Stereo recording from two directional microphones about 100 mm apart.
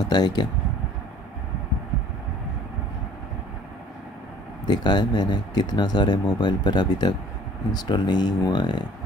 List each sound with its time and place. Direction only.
0.0 s speech: 45° left (ahead or behind)
4.6 s speech: 50° left (ahead or behind)